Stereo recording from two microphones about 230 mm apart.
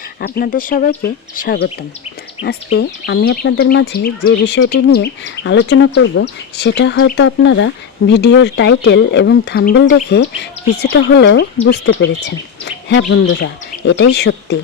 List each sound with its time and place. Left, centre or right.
0.2 s speech: left
2.7 s speech: left